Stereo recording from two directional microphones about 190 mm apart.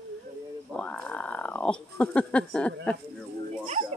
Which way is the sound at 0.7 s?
5° left (ahead or behind).